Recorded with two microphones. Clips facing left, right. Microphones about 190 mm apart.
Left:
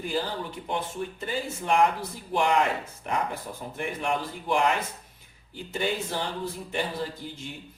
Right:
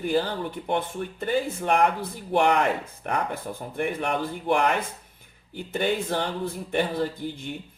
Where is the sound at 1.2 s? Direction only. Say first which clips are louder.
Right 5 dB; 55° right (ahead or behind).